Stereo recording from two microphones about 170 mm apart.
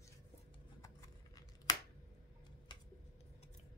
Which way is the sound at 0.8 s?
20° left (ahead or behind).